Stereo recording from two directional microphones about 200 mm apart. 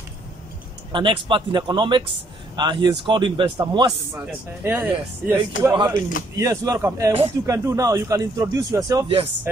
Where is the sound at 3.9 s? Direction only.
5° right (ahead or behind).